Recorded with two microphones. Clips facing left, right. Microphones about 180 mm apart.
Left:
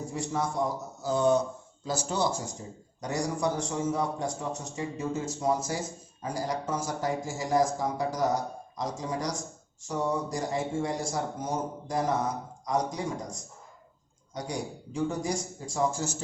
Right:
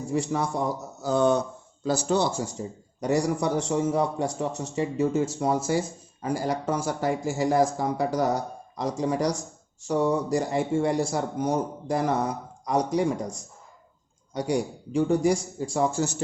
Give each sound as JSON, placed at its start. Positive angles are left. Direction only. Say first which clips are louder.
{"t": 0.1, "sound": "speech", "louder": "right 6 dB", "side_deg": -70}
{"t": 3.0, "sound": "speech", "louder": "right 5 dB", "side_deg": -65}
{"t": 14.3, "sound": "speech", "louder": "right 8 dB", "side_deg": -65}